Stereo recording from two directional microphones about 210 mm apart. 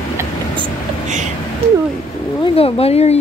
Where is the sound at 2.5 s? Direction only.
30° left (ahead or behind).